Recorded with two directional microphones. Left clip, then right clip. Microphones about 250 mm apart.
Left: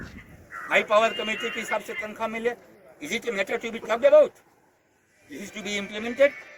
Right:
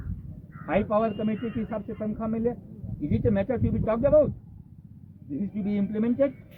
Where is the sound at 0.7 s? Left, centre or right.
Centre.